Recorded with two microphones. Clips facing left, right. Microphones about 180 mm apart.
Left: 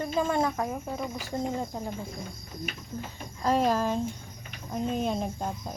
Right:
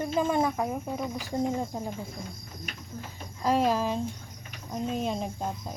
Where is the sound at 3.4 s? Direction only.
5° right (ahead or behind).